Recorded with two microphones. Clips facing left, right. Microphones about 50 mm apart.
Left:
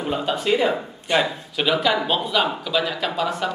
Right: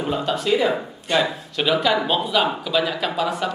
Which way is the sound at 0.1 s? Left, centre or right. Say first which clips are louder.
Even; centre.